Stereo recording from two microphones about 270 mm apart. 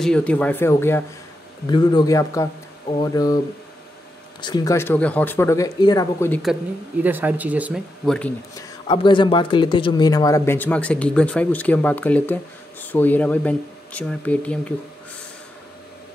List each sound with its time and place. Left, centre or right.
0.0 s speech: centre
4.4 s speech: centre
7.0 s speech: centre
8.5 s speech: centre